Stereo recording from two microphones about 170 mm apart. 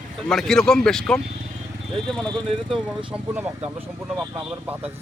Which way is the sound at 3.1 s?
10° right (ahead or behind).